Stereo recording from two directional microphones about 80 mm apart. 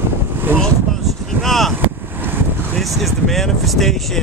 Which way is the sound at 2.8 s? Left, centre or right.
Centre.